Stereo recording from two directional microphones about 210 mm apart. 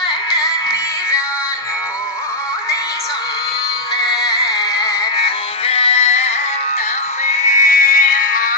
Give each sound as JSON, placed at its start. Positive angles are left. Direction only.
{"t": 0.0, "sound": "music", "side_deg": 20}
{"t": 3.9, "sound": "music", "side_deg": 20}
{"t": 5.7, "sound": "music", "side_deg": 30}